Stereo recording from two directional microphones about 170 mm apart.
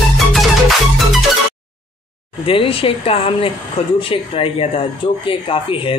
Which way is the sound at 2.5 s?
30° left (ahead or behind).